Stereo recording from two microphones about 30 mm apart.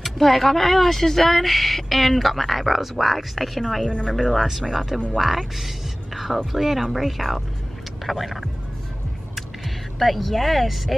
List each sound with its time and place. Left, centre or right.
0.0 s speech: centre
3.8 s speech: left
4.1 s speech: centre
5.1 s speech: centre
9.9 s speech: centre